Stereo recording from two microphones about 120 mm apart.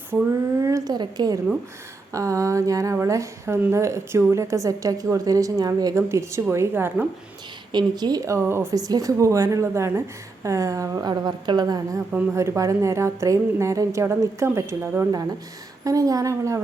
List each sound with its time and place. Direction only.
0.1 s speech: 15° right (ahead or behind)
0.6 s a woman's voice: 30° right (ahead or behind)
7.7 s a woman's voice: 40° right (ahead or behind); by 15.0 s 20° right (ahead or behind)
15.1 s a woman's voice: 30° right (ahead or behind)